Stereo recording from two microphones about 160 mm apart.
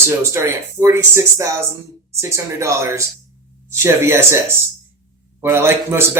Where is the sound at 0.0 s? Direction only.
15° right (ahead or behind).